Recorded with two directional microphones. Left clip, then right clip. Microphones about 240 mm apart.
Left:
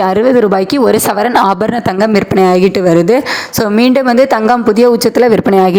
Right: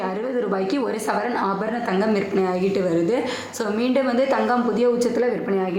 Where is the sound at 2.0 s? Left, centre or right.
Left.